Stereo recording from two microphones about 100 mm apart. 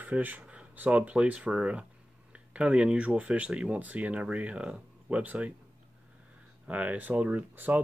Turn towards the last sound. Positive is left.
turn(degrees=-15)  # may be behind; listen again after turning